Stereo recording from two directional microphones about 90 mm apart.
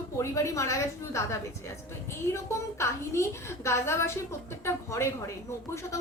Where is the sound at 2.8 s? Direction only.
30° left (ahead or behind).